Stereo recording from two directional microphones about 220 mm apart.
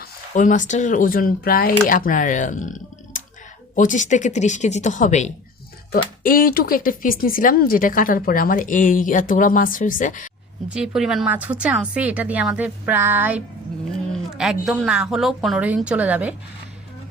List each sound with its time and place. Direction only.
0.0 s speech: 35° left (ahead or behind)
10.7 s a woman's voice: 5° right (ahead or behind)